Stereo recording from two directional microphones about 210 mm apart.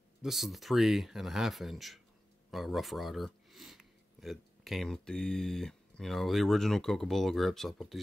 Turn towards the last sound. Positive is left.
turn(degrees=0)  # may be behind; listen again after turning